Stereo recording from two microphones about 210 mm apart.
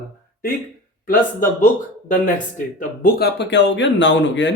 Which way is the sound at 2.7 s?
45° left (ahead or behind).